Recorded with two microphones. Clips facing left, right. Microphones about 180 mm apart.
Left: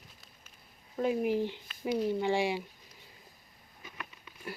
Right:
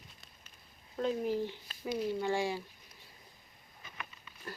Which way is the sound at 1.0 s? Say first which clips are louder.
Left 3 dB; 15° left (ahead or behind).